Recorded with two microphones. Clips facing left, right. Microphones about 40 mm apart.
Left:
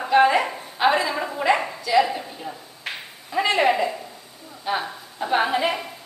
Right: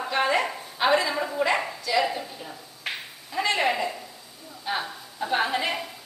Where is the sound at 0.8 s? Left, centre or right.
Centre.